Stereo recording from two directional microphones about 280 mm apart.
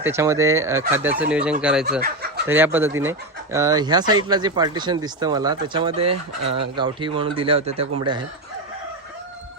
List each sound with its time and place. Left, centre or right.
0.0 s speech: centre
2.0 s chicken: right
2.5 s speech: centre